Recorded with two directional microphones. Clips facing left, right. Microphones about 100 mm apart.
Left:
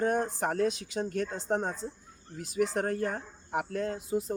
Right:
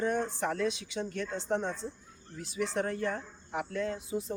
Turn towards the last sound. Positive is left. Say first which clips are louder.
# left 2 dB
turn(degrees=45)  # may be behind; listen again after turning